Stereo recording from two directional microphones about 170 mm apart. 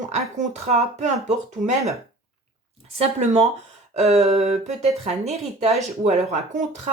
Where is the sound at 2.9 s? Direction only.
40° right (ahead or behind).